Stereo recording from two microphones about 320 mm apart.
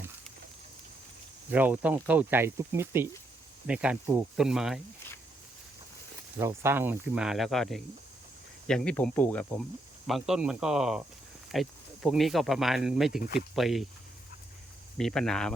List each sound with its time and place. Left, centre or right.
1.5 s speech: centre
6.4 s speech: centre
13.1 s speech: left
13.6 s speech: centre
14.9 s speech: centre